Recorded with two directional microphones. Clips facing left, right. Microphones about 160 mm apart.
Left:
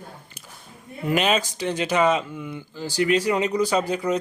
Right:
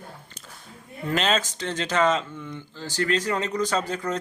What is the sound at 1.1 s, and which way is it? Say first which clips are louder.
Speech: left 3 dB; 10° left (ahead or behind).